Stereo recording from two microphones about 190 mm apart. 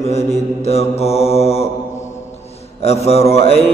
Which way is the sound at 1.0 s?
30° left (ahead or behind).